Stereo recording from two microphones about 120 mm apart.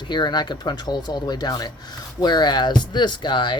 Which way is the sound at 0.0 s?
35° left (ahead or behind).